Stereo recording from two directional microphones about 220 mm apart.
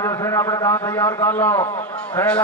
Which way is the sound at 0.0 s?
10° left (ahead or behind).